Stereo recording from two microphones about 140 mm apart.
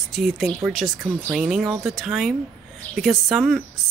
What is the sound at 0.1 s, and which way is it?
A woman's voice, centre (ahead or behind).